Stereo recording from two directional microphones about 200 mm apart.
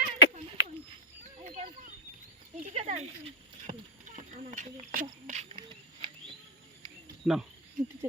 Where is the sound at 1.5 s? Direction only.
35° right (ahead or behind).